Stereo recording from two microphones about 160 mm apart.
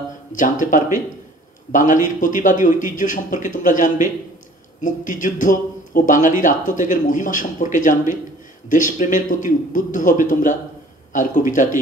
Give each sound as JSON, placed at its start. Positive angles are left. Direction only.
{"t": 0.4, "sound": "speech", "side_deg": 55}